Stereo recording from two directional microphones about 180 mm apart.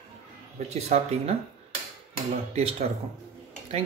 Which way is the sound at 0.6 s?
35° right (ahead or behind).